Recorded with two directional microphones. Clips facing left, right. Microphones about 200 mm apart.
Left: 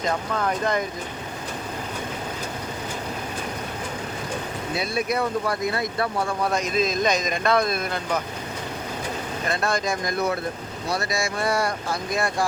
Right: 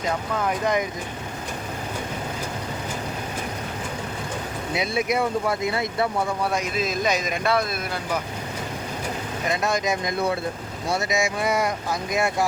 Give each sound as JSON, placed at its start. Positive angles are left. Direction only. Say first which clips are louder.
{"t": 0.0, "sound": "speech", "louder": "even", "side_deg": -10}
{"t": 4.8, "sound": "speech", "louder": "right 2 dB", "side_deg": -20}
{"t": 6.5, "sound": "speech", "louder": "left 2 dB", "side_deg": -10}
{"t": 9.5, "sound": "speech", "louder": "right 1 dB", "side_deg": -20}